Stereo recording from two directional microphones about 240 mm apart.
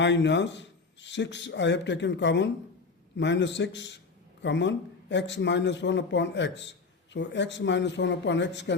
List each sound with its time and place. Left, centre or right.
0.0 s a man's voice: left